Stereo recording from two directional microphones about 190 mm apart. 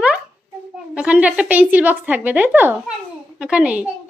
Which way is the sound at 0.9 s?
5° right (ahead or behind).